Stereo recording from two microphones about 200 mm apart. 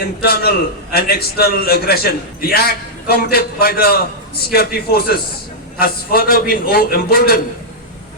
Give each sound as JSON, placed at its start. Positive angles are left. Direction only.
{"t": 0.2, "sound": "a man's voice", "side_deg": 50}